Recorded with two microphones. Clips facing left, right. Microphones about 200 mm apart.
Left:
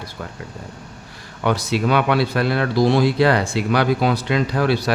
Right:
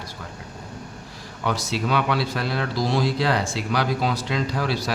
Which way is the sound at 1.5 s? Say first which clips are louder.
Left 6 dB; 60° left (ahead or behind).